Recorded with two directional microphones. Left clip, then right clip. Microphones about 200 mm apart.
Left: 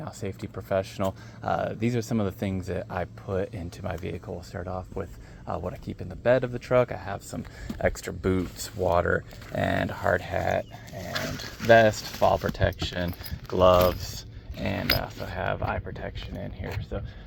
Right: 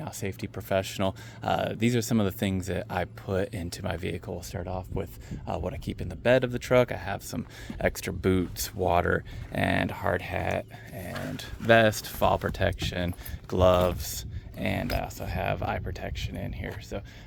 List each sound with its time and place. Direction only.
0.0 s speech: 35° right (ahead or behind)